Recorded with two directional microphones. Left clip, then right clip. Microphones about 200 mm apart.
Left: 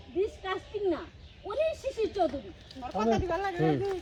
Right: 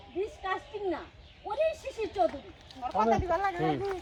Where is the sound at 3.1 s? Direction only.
15° right (ahead or behind).